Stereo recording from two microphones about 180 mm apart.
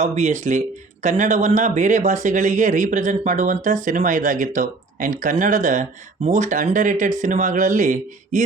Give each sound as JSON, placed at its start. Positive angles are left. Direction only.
{"t": 0.0, "sound": "speech", "side_deg": -40}